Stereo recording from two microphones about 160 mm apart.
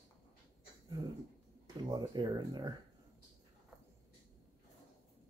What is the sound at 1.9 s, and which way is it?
Speech, 25° right (ahead or behind).